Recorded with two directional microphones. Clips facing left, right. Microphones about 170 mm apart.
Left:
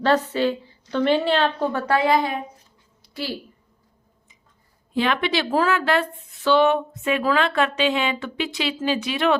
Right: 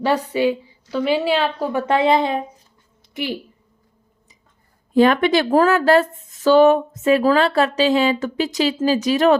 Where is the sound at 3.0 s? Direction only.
20° right (ahead or behind).